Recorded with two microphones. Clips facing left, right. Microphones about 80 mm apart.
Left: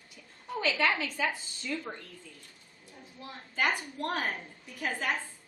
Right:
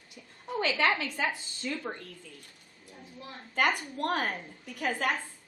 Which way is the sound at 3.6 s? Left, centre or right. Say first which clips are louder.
Right 3 dB; right.